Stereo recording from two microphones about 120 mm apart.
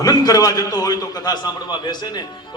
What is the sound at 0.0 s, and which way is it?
Music, 30° left (ahead or behind).